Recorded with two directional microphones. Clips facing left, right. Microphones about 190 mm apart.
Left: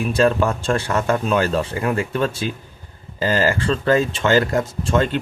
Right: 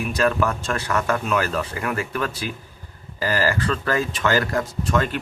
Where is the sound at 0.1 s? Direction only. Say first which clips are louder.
Left 4 dB; 30° left (ahead or behind).